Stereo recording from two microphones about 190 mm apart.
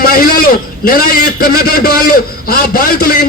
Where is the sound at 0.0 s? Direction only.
50° left (ahead or behind).